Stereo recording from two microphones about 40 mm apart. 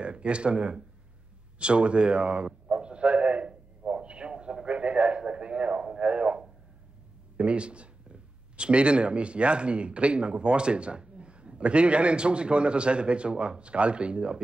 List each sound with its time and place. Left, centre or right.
0.0 s speech: right
1.6 s a sound: right
5.9 s radio: right
7.3 s speech: right